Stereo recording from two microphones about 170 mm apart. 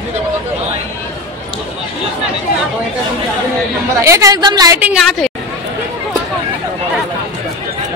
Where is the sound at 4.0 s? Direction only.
15° right (ahead or behind).